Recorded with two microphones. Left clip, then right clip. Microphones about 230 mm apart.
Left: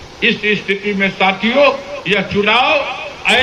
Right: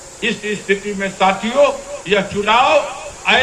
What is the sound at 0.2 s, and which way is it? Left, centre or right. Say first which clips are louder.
A man's voice: left 6 dB; right.